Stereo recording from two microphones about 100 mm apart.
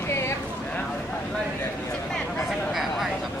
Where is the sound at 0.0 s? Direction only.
25° left (ahead or behind).